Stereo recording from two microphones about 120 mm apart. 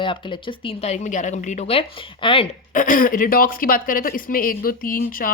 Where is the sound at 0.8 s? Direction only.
80° left.